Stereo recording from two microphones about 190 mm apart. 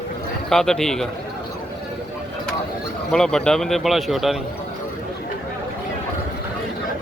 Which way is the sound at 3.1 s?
5° left (ahead or behind).